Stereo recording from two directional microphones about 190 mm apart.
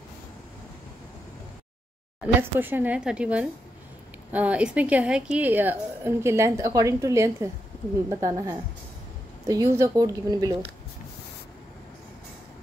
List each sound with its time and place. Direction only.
2.4 s a woman's voice: 10° right (ahead or behind)